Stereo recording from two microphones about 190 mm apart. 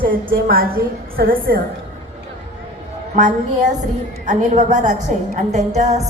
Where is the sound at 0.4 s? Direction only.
50° right (ahead or behind).